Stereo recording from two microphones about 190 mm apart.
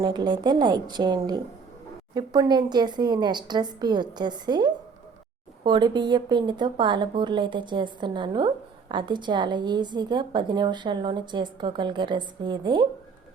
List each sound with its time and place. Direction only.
0.0 s a woman's voice: 20° right (ahead or behind)